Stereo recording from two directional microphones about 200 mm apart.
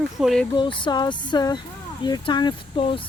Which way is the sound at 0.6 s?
25° left (ahead or behind).